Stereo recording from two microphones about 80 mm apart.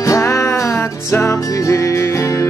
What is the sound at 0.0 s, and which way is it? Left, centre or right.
Music, left.